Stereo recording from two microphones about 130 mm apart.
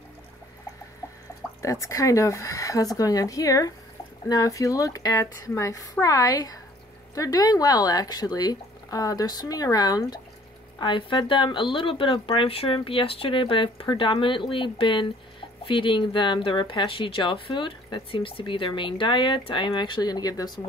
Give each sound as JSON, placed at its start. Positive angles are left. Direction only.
{"t": 1.6, "sound": "speech", "side_deg": 25}